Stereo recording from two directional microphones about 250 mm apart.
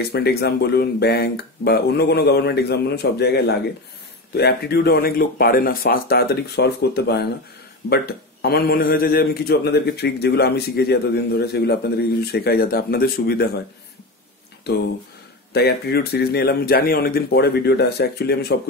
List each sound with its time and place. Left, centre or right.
0.1 s a man's voice: left
14.7 s a man's voice: left